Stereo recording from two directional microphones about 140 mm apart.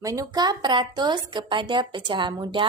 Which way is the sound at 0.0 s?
25° right (ahead or behind).